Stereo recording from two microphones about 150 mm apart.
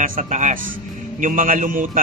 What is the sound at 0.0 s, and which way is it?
A man's voice, 60° right (ahead or behind).